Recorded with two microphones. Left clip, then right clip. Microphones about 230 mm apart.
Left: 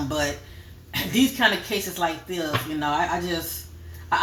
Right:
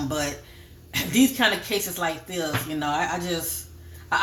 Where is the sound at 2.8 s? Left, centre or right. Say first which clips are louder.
Left 2 dB; right.